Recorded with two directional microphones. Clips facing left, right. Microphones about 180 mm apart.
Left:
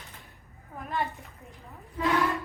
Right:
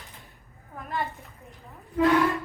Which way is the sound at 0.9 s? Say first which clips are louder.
Even; centre (ahead or behind).